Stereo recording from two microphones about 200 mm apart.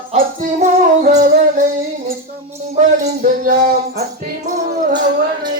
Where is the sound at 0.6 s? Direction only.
45° right (ahead or behind).